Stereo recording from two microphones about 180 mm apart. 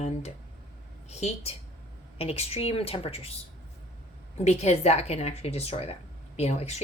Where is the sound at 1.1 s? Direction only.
35° left (ahead or behind).